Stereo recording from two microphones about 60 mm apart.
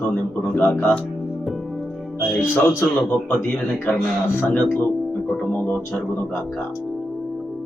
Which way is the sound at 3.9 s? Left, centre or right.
Left.